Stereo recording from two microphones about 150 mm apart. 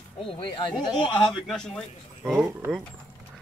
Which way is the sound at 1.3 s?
Centre (ahead or behind).